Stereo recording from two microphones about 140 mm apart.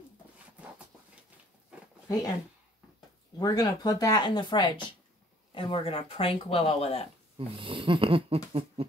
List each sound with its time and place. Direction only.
3.3 s speech: 30° left (ahead or behind); by 7.1 s 45° left (ahead or behind)
7.3 s speech: 40° right (ahead or behind)